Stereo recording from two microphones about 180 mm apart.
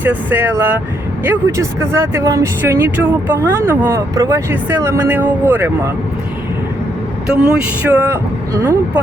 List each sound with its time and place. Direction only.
0.0 s speech: 10° right (ahead or behind)
7.3 s speech: 5° right (ahead or behind)